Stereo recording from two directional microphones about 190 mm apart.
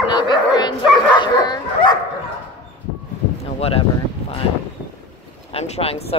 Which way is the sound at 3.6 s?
30° left (ahead or behind).